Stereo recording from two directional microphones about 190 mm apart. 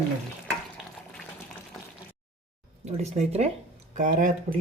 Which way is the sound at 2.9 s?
35° right (ahead or behind).